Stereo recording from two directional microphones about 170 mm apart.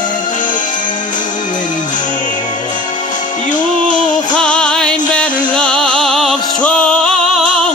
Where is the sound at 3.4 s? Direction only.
50° left (ahead or behind).